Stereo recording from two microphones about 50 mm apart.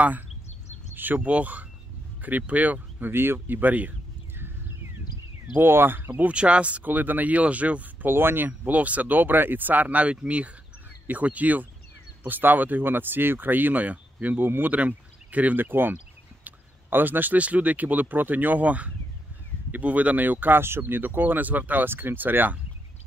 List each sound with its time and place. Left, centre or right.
0.9 s speech: right
3.1 s speech: right
5.5 s speech: right
6.2 s speech: right
6.9 s speech: right
8.1 s speech: right